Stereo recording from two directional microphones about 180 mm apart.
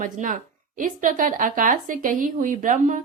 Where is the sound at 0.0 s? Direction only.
45° right (ahead or behind).